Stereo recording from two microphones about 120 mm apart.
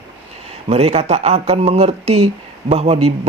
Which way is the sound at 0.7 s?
60° right (ahead or behind).